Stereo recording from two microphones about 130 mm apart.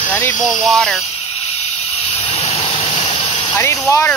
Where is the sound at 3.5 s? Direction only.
20° left (ahead or behind).